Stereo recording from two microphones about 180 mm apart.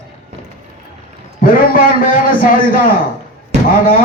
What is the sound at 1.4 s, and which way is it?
A man's voice, 50° left (ahead or behind).